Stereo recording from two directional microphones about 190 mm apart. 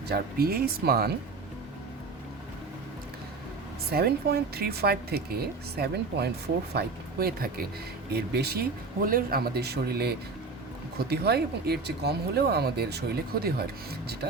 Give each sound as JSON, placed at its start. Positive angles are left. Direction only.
{"t": 0.1, "sound": "speech", "side_deg": -55}
{"t": 3.9, "sound": "speech", "side_deg": -55}